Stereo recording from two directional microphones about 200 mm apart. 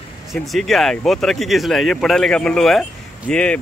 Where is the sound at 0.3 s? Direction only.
Centre (ahead or behind).